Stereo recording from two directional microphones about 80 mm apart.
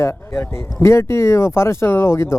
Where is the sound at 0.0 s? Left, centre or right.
Left.